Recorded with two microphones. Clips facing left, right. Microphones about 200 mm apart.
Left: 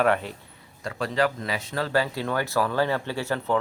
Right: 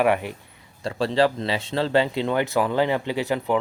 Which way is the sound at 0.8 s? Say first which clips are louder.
Right 4 dB; 30° right (ahead or behind).